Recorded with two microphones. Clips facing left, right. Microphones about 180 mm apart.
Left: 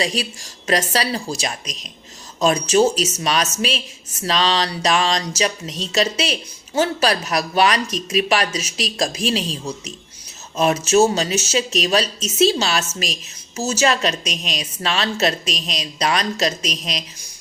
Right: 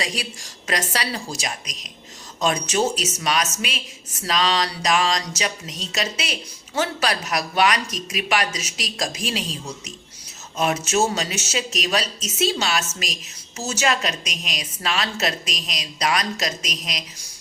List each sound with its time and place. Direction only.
0.0 s a woman's voice: 30° left (ahead or behind)
10.6 s a woman's voice: 30° left (ahead or behind)